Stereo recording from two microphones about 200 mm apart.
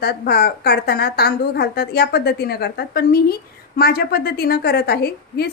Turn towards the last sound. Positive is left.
turn(degrees=50)  # may be behind; listen again after turning